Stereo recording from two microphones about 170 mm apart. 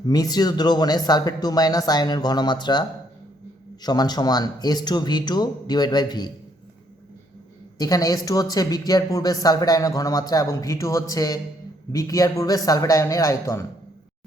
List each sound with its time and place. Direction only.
0.1 s speech: 25° left (ahead or behind)
7.8 s speech: 20° left (ahead or behind)